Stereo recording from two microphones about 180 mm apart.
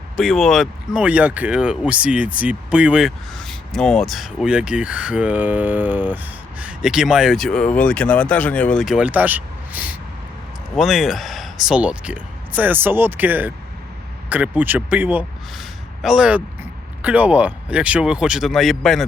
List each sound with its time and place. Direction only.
0.2 s a man's voice: centre (ahead or behind)